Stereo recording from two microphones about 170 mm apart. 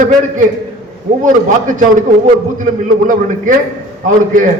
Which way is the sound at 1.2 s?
50° right (ahead or behind).